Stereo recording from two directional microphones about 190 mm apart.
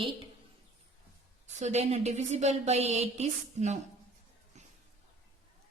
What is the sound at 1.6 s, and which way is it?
A woman's voice, 35° right (ahead or behind).